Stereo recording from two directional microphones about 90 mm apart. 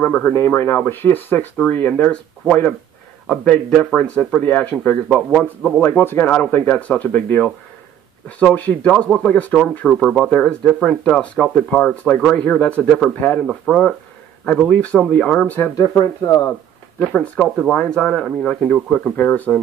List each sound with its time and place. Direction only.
0.0 s speech: 20° left (ahead or behind)
5.0 s speech: centre (ahead or behind)
5.4 s speech: 10° left (ahead or behind)
5.8 s speech: 25° left (ahead or behind)
9.9 s speech: centre (ahead or behind)
10.3 s speech: 10° left (ahead or behind)
15.7 s speech: 40° left (ahead or behind)
17.0 s speech: 15° left (ahead or behind)